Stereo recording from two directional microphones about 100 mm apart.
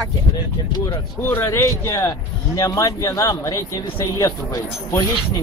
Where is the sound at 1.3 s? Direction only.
25° left (ahead or behind).